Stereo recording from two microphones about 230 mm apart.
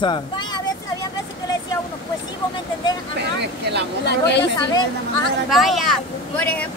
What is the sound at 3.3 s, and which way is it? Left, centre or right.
Vehicle, right.